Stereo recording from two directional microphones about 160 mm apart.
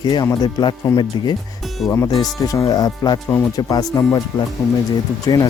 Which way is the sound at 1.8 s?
15° left (ahead or behind).